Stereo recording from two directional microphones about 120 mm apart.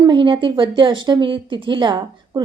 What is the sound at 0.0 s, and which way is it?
A woman's voice, 40° right (ahead or behind).